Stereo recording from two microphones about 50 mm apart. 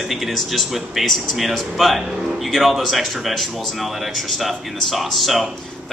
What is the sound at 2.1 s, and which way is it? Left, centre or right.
Speech, centre.